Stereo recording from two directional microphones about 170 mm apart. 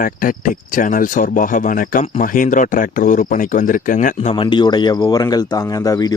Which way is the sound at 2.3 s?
50° left (ahead or behind).